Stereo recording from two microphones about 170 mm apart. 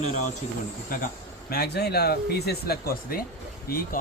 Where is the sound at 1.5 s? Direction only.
65° left (ahead or behind).